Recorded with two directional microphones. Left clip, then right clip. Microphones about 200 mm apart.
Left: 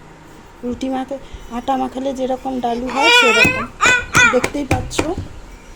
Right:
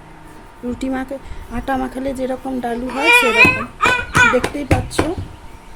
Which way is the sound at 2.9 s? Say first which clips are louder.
Left 1 dB; 45° left (ahead or behind).